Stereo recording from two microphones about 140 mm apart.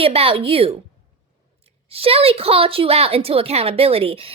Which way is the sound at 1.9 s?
45° right (ahead or behind).